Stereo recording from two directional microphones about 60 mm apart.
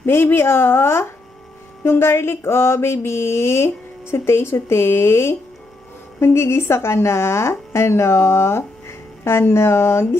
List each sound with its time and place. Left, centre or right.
0.0 s speech: left